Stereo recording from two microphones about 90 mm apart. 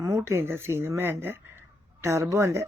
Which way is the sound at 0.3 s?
30° right (ahead or behind).